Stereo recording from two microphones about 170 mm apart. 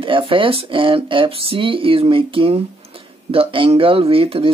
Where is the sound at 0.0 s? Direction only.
30° right (ahead or behind).